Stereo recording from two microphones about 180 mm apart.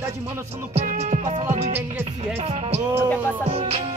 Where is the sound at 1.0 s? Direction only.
40° right (ahead or behind).